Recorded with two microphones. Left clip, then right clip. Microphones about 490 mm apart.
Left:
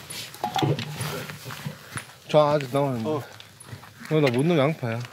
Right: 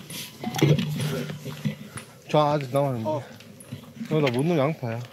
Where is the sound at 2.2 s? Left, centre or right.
Centre.